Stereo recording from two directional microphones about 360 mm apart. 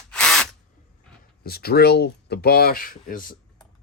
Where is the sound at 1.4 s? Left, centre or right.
Left.